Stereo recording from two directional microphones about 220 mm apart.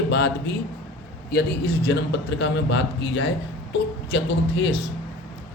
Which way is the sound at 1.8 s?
50° left (ahead or behind).